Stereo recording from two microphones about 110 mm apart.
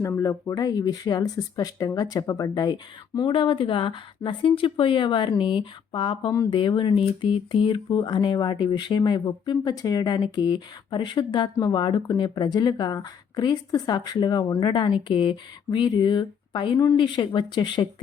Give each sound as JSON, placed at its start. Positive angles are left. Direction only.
{"t": 0.0, "sound": "speech", "side_deg": 30}